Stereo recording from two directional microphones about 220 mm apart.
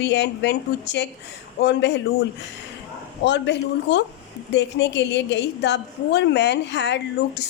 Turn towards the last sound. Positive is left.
turn(degrees=50)  # may be behind; listen again after turning